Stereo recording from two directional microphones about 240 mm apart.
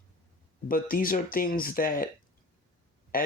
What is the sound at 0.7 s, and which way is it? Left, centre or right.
Speech, left.